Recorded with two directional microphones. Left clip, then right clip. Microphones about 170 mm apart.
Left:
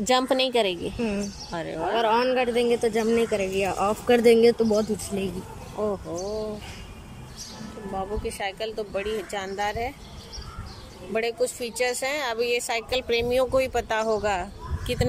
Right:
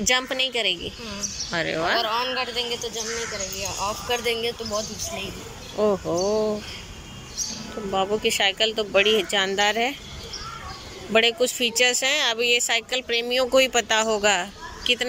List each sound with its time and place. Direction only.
0.0 s a woman's voice: 25° left (ahead or behind)
1.5 s speech: 10° left (ahead or behind)
2.0 s speech: 65° left (ahead or behind)
5.8 s speech: centre (ahead or behind)
7.9 s speech: centre (ahead or behind)
11.1 s speech: 5° left (ahead or behind)